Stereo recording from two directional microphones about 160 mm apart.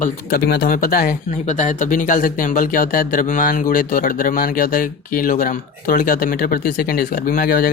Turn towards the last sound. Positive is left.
turn(degrees=65)  # may be behind; listen again after turning